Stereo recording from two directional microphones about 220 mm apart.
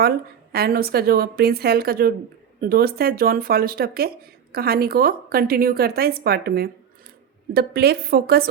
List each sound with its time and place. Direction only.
0.5 s a woman's voice: 45° right (ahead or behind)